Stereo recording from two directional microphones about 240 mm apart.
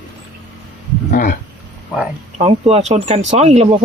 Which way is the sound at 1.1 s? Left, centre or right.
Left.